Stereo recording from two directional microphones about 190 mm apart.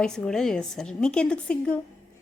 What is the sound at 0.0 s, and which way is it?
A woman's voice, 5° left (ahead or behind).